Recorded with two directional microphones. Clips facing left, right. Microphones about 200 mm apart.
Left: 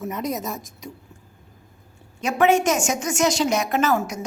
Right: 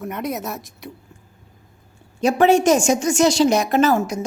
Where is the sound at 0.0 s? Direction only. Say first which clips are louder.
Right 1 dB; centre (ahead or behind).